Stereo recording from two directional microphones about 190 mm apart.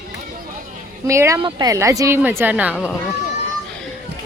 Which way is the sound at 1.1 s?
15° right (ahead or behind).